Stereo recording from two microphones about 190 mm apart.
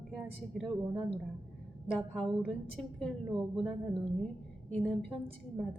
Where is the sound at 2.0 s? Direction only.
Centre (ahead or behind).